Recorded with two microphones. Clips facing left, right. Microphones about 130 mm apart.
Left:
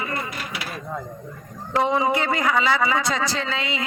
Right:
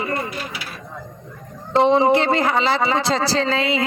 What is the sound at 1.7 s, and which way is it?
A man's voice, 25° right (ahead or behind).